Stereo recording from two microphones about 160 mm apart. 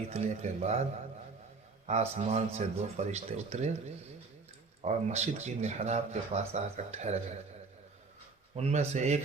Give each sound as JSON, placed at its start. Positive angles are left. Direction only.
{"t": 0.1, "sound": "speech", "side_deg": -45}
{"t": 1.9, "sound": "speech", "side_deg": -45}
{"t": 4.8, "sound": "speech", "side_deg": -45}
{"t": 8.5, "sound": "speech", "side_deg": -40}